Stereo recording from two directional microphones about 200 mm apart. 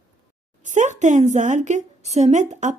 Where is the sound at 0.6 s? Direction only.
35° right (ahead or behind).